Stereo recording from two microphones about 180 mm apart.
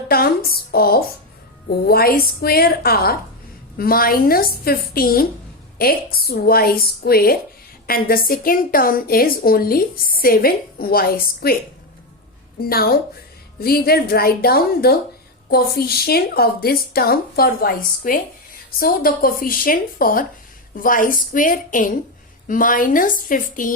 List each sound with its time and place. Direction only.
0.1 s a sound: 55° left (ahead or behind)
1.9 s speech: 55° left (ahead or behind)
12.5 s a woman's voice: 55° left (ahead or behind)